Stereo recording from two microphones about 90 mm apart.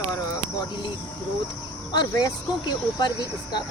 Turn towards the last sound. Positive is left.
turn(degrees=50)  # may be behind; listen again after turning